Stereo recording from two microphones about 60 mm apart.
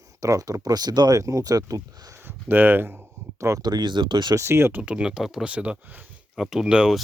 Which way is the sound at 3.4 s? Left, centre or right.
Right.